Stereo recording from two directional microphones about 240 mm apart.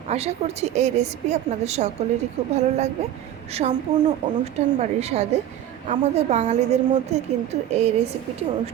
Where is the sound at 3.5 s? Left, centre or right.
Right.